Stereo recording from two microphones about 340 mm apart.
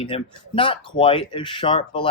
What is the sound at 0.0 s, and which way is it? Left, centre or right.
Speech, centre.